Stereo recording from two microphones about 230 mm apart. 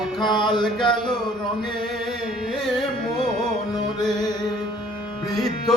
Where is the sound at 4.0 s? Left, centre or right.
Centre.